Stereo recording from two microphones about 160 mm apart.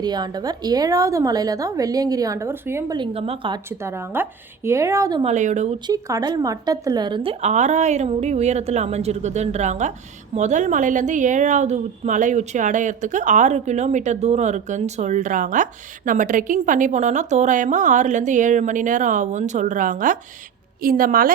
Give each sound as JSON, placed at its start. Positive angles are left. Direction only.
{"t": 0.0, "sound": "a woman's voice", "side_deg": -25}
{"t": 3.0, "sound": "a woman's voice", "side_deg": -35}
{"t": 3.7, "sound": "speech", "side_deg": -15}
{"t": 5.2, "sound": "a woman's voice", "side_deg": -50}
{"t": 5.8, "sound": "a woman's voice", "side_deg": -20}
{"t": 7.5, "sound": "a woman's voice", "side_deg": -45}